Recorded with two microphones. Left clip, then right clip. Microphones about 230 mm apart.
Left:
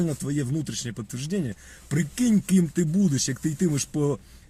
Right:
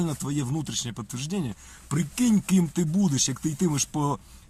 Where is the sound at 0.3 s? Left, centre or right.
Centre.